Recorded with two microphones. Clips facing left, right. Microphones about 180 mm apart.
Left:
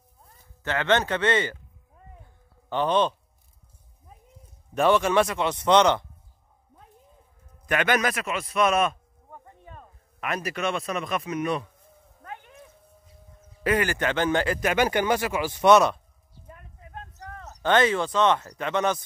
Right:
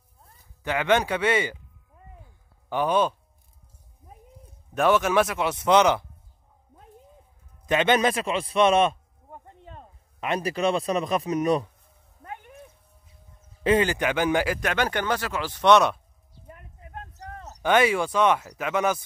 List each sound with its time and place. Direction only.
0.7 s speech: 10° right (ahead or behind)
2.7 s speech: 10° right (ahead or behind)
4.7 s a man's voice: centre (ahead or behind)
7.6 s a man's voice: 25° right (ahead or behind)
13.7 s speech: 20° right (ahead or behind)
14.6 s speech: 10° left (ahead or behind)
17.4 s speech: 10° right (ahead or behind)